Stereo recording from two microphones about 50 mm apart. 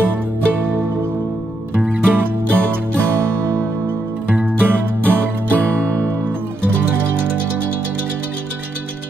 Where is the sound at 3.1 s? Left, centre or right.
Right.